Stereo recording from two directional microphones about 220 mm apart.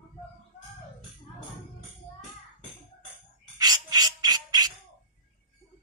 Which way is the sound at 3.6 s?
20° right (ahead or behind).